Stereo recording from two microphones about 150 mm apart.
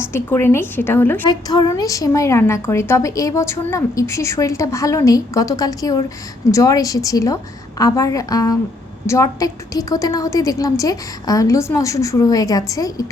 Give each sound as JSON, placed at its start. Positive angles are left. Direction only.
{"t": 0.0, "sound": "a woman's voice", "side_deg": 15}
{"t": 1.3, "sound": "a woman's voice", "side_deg": 25}